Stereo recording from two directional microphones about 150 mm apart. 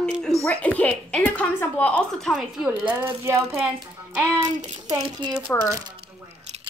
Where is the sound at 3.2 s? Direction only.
15° right (ahead or behind).